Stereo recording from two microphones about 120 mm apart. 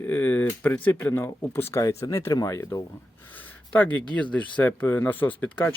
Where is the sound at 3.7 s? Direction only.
10° left (ahead or behind).